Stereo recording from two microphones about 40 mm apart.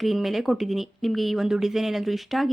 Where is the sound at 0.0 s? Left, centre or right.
Centre.